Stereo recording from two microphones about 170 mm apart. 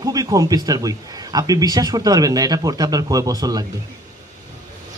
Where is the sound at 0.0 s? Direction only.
20° right (ahead or behind).